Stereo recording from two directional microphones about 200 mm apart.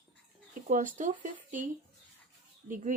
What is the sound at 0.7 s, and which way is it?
Speech, 40° right (ahead or behind).